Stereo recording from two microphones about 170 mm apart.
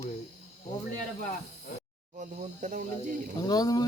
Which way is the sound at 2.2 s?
50° right (ahead or behind).